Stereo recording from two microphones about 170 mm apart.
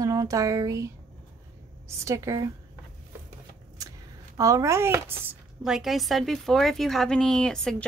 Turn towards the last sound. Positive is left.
turn(degrees=5)  # may be behind; listen again after turning